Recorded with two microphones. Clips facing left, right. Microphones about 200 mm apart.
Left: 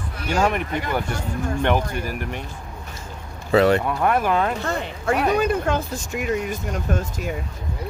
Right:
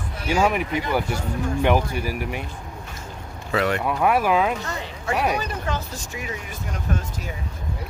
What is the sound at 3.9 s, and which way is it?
Speech, 5° right (ahead or behind).